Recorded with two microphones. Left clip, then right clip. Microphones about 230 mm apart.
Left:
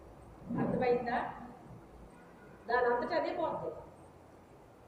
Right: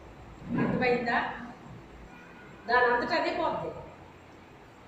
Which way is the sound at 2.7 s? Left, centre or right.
Right.